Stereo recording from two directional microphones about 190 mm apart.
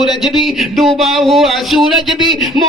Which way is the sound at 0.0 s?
Centre (ahead or behind).